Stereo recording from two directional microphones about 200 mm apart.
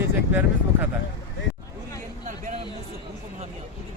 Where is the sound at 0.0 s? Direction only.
10° right (ahead or behind).